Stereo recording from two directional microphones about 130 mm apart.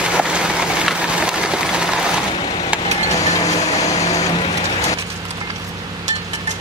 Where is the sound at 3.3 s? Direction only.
25° left (ahead or behind).